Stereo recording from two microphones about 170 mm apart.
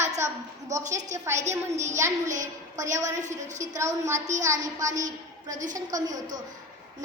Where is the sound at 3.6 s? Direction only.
15° right (ahead or behind).